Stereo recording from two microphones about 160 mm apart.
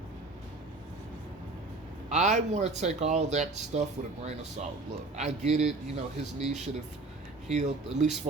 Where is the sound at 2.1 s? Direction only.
50° right (ahead or behind).